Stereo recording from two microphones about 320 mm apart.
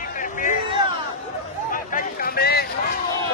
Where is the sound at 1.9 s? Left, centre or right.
Left.